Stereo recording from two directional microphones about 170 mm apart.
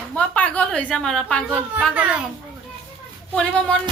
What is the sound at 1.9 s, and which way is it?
Speech, 5° right (ahead or behind).